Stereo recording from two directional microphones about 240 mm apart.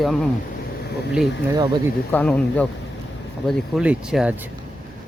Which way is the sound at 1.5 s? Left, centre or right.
Centre.